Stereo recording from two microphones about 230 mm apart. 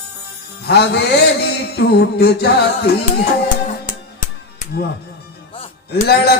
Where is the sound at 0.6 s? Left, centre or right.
Left.